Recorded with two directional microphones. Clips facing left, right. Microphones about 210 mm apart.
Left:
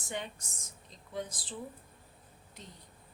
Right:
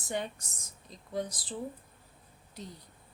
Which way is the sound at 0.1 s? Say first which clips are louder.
Right 5 dB; 40° right (ahead or behind).